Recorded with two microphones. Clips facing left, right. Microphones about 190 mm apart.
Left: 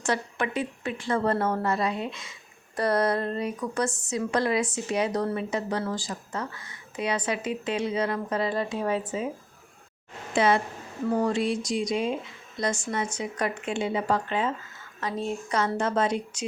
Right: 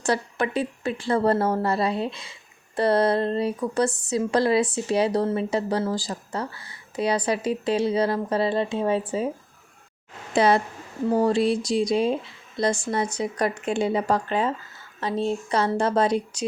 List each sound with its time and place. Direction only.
0.0 s speech: 35° right (ahead or behind)
10.3 s speech: 35° right (ahead or behind)